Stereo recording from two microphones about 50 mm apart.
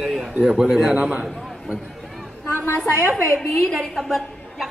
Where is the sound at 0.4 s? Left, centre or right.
Centre.